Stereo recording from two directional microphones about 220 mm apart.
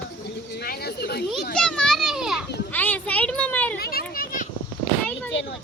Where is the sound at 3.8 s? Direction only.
45° left (ahead or behind).